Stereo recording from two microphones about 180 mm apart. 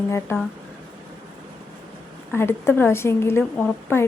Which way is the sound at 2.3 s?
15° left (ahead or behind).